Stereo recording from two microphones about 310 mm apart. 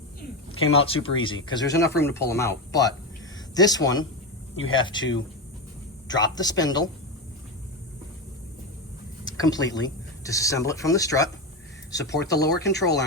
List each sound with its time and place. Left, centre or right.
0.2 s a sound: left
0.8 s speech: centre
4.5 s speech: left
4.8 s speech: centre
6.1 s speech: centre
9.2 s speech: centre
12.0 s speech: left